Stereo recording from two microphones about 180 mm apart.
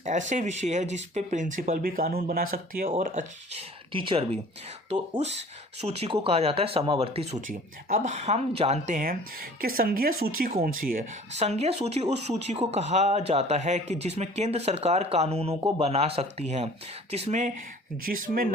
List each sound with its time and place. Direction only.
0.0 s speech: 45° right (ahead or behind)
3.9 s speech: 30° right (ahead or behind)
7.4 s speech: 45° right (ahead or behind)
11.3 s speech: 35° right (ahead or behind)
18.0 s speech: 55° right (ahead or behind)